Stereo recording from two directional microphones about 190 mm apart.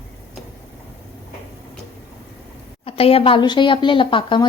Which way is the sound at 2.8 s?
30° left (ahead or behind).